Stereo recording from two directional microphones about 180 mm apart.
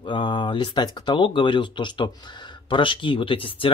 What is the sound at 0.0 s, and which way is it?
Speech, 25° left (ahead or behind).